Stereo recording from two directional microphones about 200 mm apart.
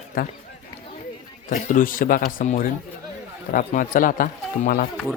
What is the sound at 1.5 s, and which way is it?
A man's voice, 40° left (ahead or behind).